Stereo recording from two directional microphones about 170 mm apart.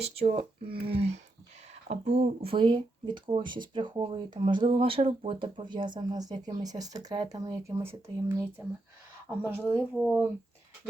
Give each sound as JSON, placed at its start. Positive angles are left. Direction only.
{"t": 0.0, "sound": "speech", "side_deg": -40}